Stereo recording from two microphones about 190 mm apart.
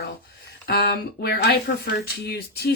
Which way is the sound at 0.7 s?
55° left (ahead or behind).